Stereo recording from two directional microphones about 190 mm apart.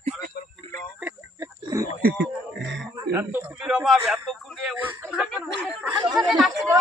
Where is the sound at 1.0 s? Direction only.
15° right (ahead or behind).